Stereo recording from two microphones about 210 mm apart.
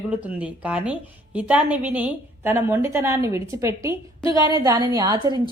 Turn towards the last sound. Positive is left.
turn(degrees=-20)  # may be behind; listen again after turning